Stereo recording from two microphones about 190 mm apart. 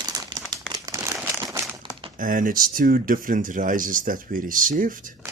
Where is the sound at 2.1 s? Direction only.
45° right (ahead or behind).